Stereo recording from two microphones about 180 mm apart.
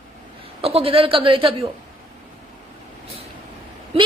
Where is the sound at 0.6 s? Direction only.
30° right (ahead or behind).